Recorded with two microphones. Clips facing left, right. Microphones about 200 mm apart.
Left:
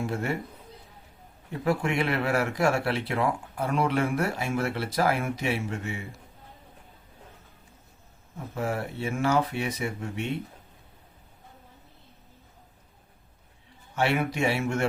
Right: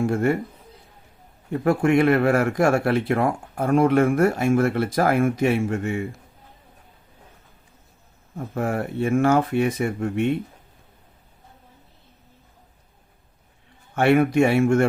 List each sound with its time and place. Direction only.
0.0 s speech: 50° right (ahead or behind)
1.6 s speech: 50° right (ahead or behind)
8.5 s speech: 50° right (ahead or behind)
13.9 s speech: 55° right (ahead or behind)